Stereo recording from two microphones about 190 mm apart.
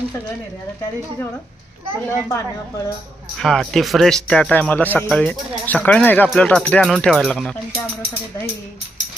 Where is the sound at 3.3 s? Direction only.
Centre (ahead or behind).